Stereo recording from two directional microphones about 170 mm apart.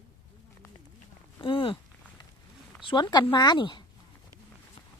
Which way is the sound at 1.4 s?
30° left (ahead or behind).